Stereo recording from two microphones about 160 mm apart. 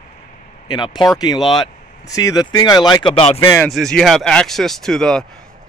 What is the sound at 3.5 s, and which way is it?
Speech, centre (ahead or behind).